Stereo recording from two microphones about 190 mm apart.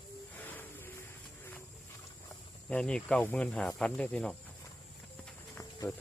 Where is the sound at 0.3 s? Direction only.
10° left (ahead or behind).